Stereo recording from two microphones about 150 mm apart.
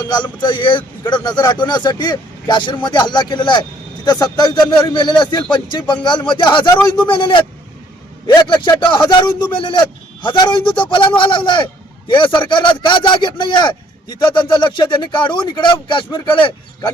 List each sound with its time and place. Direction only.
0.0 s a man's voice: 30° left (ahead or behind)